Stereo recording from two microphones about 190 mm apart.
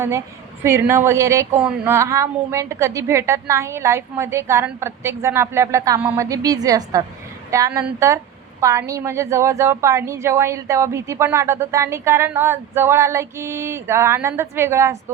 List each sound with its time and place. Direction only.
0.6 s a woman's voice: 15° right (ahead or behind)